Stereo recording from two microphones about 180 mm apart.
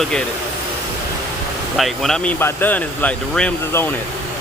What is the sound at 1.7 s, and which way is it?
Speech, centre (ahead or behind).